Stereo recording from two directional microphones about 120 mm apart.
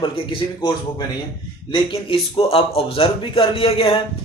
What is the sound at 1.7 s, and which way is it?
Speech, 55° left (ahead or behind).